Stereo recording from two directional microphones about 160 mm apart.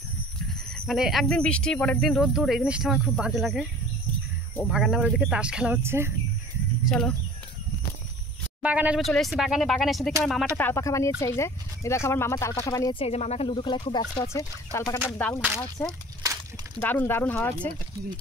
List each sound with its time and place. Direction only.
0.8 s speech: centre (ahead or behind)
4.6 s speech: 5° right (ahead or behind)
5.9 s speech: 15° right (ahead or behind)
6.8 s speech: centre (ahead or behind)
8.6 s speech: 10° right (ahead or behind)
10.5 s speech: 15° left (ahead or behind)
13.0 s speech: 40° left (ahead or behind)
14.2 s speech: 15° left (ahead or behind)
16.2 s a sound: 25° right (ahead or behind)
16.8 s speech: 10° left (ahead or behind)